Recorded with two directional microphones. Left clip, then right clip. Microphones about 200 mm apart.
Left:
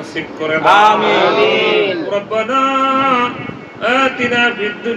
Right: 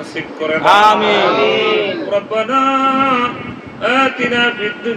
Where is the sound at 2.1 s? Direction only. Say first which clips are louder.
Right 1 dB; 5° right (ahead or behind).